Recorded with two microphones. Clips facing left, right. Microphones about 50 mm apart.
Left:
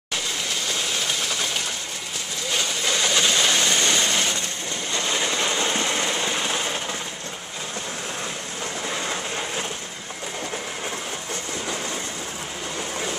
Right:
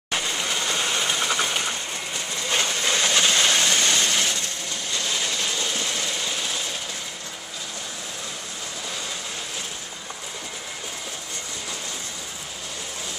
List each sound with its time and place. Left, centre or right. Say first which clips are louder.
0.7 s train: right 2 dB; centre
2.8 s a sound: left 1 dB; centre
4.9 s sewing machine: left 3 dB; left